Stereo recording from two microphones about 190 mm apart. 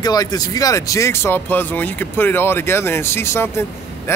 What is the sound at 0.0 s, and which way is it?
Speech, 20° left (ahead or behind).